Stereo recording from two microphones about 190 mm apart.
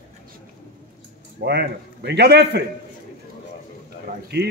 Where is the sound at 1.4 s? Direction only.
60° right (ahead or behind).